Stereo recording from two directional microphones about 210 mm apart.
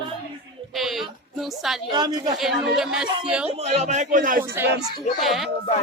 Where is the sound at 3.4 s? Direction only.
30° right (ahead or behind).